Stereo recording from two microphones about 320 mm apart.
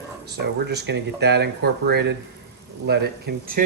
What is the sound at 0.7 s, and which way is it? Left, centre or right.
Speech, right.